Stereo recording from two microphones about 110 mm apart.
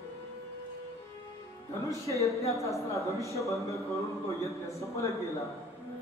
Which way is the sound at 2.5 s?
30° left (ahead or behind).